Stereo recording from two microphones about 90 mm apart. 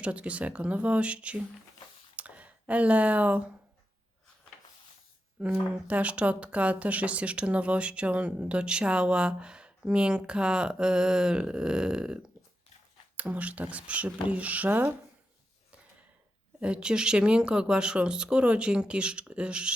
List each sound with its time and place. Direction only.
0.0 s speech: 15° right (ahead or behind)
2.1 s a sound: 15° right (ahead or behind)
5.4 s speech: 15° right (ahead or behind)
16.6 s speech: 10° right (ahead or behind)